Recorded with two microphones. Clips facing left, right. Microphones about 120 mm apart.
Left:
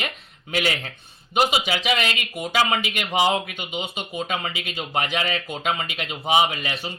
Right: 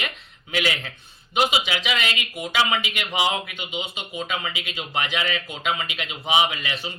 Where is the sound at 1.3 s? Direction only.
40° left (ahead or behind).